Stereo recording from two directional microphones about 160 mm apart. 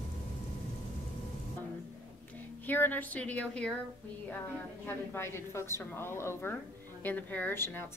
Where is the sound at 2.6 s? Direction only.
10° left (ahead or behind).